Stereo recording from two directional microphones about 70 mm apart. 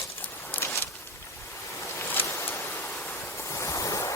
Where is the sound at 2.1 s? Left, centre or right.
Left.